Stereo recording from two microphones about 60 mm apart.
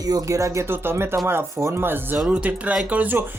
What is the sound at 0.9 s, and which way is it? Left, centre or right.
Speech, right.